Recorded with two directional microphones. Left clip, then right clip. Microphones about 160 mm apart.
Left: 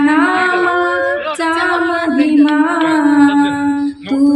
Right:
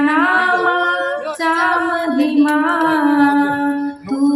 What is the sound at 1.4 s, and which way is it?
Female singing, 15° left (ahead or behind).